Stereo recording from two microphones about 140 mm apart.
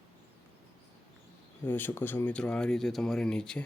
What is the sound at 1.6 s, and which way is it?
Speech, 15° left (ahead or behind).